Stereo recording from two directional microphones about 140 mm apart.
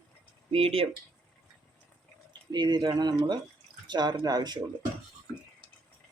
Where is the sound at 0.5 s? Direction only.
45° right (ahead or behind).